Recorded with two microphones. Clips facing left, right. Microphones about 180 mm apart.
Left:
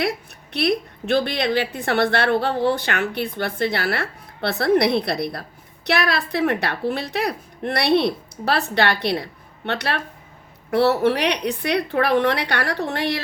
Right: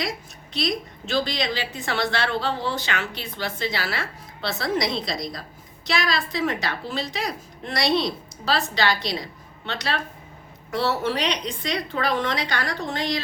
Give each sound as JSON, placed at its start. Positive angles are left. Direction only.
{"t": 0.0, "sound": "a woman's voice", "side_deg": 60}